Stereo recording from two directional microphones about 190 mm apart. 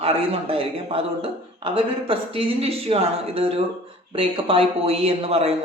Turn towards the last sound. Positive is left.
turn(degrees=-30)  # may be behind; listen again after turning